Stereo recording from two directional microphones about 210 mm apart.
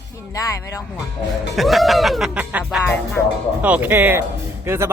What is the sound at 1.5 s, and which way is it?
Music, centre (ahead or behind).